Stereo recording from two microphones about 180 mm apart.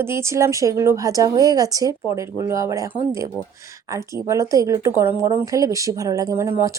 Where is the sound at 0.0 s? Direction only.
15° right (ahead or behind).